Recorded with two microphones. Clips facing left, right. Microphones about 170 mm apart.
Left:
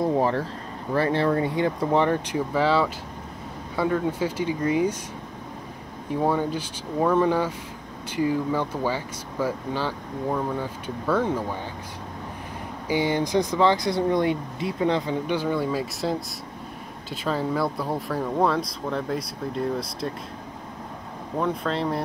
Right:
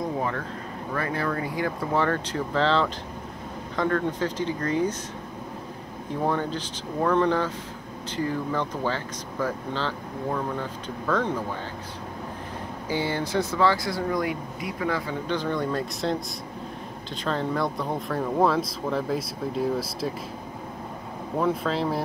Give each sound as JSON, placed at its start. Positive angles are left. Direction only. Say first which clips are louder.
{"t": 0.2, "sound": "a sound", "louder": "left 6 dB", "side_deg": 30}
{"t": 0.9, "sound": "speech", "louder": "left 6 dB", "side_deg": 30}
{"t": 6.2, "sound": "speech", "louder": "left 2 dB", "side_deg": 10}
{"t": 12.8, "sound": "speech", "louder": "left 4 dB", "side_deg": 15}
{"t": 17.2, "sound": "speech", "louder": "left 1 dB", "side_deg": 5}
{"t": 21.4, "sound": "speech", "louder": "right 1 dB", "side_deg": 0}